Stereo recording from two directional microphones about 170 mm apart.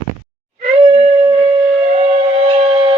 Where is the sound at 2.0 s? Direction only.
35° right (ahead or behind).